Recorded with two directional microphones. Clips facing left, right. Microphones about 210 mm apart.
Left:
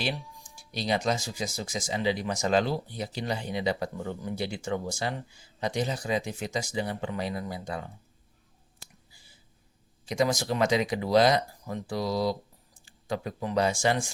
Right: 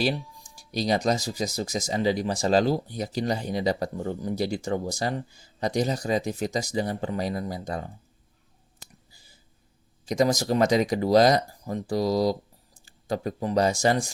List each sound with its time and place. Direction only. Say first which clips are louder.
0.0 s speech: right 6 dB; 40° right (ahead or behind)
10.1 s speech: right 4 dB; 40° right (ahead or behind)